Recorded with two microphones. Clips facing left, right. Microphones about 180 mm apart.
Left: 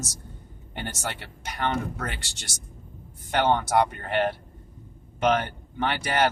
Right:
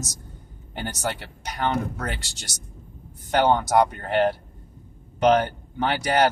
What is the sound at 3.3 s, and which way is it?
Speech, 45° right (ahead or behind).